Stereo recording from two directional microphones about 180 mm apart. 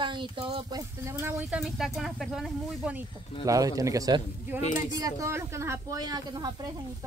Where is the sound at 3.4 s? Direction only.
20° right (ahead or behind).